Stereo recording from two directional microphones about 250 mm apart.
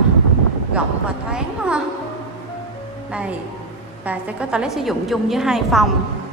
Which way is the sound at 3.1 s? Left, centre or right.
Centre.